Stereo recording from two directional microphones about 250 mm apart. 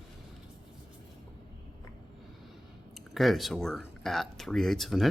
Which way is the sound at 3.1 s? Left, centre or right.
Centre.